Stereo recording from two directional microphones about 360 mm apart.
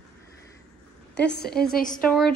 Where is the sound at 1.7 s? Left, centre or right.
Left.